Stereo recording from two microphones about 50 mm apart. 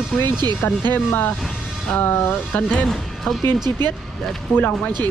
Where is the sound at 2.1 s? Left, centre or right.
Left.